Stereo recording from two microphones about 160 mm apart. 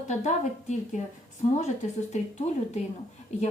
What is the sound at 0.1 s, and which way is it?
Speech, 50° left (ahead or behind).